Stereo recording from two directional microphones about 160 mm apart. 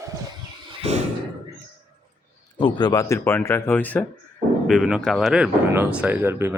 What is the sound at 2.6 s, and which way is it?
Speech, 25° left (ahead or behind).